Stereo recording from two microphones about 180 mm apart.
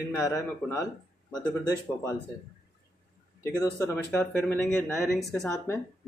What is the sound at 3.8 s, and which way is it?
Speech, 15° left (ahead or behind).